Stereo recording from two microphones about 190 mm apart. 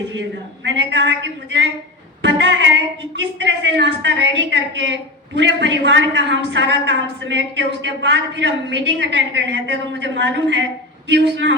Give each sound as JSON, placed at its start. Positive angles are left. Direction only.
{"t": 0.6, "sound": "a woman's voice", "side_deg": -70}
{"t": 2.2, "sound": "music", "side_deg": -70}
{"t": 3.4, "sound": "a woman's voice", "side_deg": -70}